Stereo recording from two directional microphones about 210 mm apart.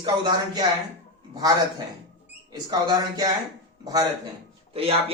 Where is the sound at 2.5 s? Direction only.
20° right (ahead or behind).